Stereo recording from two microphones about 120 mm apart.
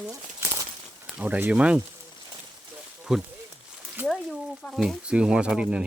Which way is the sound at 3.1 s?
5° right (ahead or behind).